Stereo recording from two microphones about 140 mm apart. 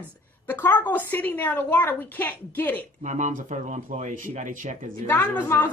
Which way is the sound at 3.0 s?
60° right (ahead or behind).